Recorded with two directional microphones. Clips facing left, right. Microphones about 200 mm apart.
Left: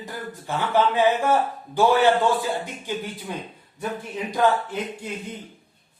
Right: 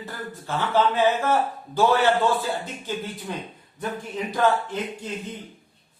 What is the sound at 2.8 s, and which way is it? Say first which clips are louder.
Speech: even; 10° left (ahead or behind).